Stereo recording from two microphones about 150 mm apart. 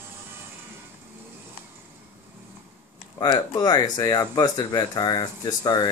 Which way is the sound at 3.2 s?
25° left (ahead or behind).